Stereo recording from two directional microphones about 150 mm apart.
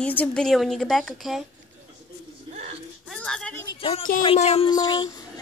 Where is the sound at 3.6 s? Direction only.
40° left (ahead or behind).